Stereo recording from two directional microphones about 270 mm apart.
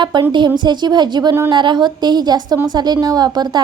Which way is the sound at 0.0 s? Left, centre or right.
Centre.